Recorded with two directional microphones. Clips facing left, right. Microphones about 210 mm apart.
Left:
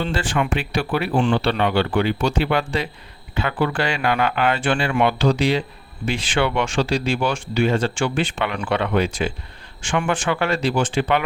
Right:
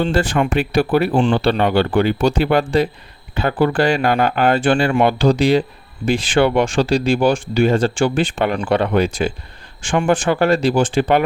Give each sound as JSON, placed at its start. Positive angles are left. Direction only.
{"t": 0.0, "sound": "speech", "side_deg": -40}